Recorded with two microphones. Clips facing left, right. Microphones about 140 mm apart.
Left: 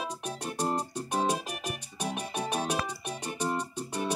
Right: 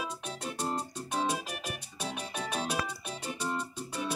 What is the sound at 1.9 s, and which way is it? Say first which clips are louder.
Music: left 4 dB; 15° left (ahead or behind).